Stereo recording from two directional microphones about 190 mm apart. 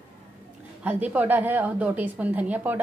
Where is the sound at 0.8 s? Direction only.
10° right (ahead or behind).